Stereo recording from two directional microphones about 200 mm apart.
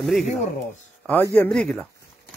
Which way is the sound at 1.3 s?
5° left (ahead or behind).